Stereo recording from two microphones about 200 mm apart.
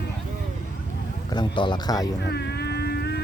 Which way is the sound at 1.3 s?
20° left (ahead or behind).